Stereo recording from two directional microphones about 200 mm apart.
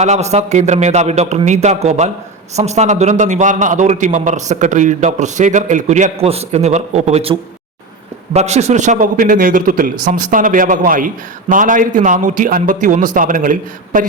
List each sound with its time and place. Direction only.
0.0 s a man's voice: 35° right (ahead or behind)